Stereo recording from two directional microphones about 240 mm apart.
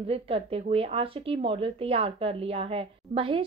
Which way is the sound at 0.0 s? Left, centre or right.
Right.